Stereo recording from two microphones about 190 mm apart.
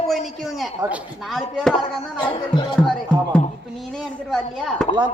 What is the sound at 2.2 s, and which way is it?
Speech, 25° left (ahead or behind).